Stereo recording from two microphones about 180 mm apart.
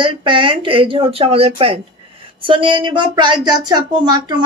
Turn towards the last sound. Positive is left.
turn(degrees=-25)  # may be behind; listen again after turning